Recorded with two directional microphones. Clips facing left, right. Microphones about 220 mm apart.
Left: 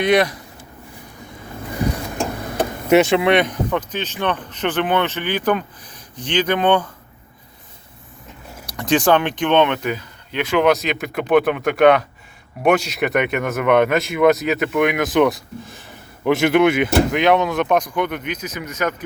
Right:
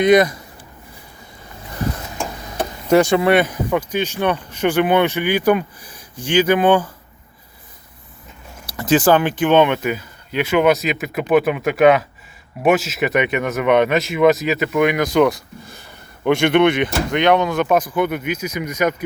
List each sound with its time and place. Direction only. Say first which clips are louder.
0.0 s speech: right 4 dB; 65° left (ahead or behind)
2.9 s speech: right 1 dB; centre (ahead or behind)
8.6 s speech: right 2 dB; 5° right (ahead or behind)